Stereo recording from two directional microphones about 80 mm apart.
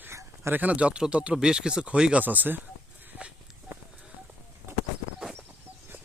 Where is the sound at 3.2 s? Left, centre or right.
Centre.